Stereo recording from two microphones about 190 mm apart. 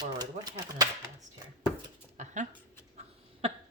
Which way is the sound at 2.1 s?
40° right (ahead or behind).